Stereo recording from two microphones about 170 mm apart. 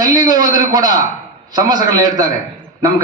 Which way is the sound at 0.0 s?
20° right (ahead or behind).